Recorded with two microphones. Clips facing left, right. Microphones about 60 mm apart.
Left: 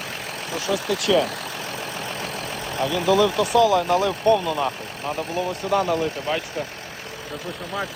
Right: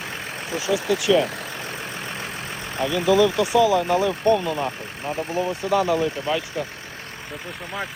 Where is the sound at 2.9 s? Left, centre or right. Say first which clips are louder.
Right 1 dB; centre.